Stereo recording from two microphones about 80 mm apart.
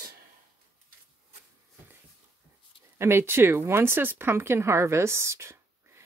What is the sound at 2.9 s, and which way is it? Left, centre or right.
Speech, right.